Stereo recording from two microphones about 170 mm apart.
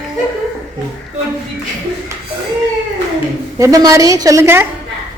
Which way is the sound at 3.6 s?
20° right (ahead or behind).